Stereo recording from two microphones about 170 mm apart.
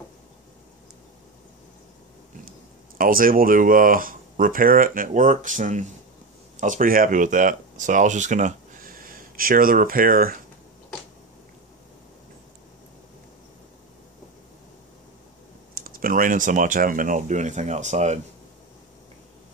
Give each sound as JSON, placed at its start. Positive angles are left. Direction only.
{"t": 3.0, "sound": "speech", "side_deg": -55}
{"t": 15.7, "sound": "speech", "side_deg": -60}